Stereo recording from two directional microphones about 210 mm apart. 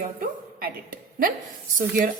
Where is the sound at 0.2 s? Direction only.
45° right (ahead or behind).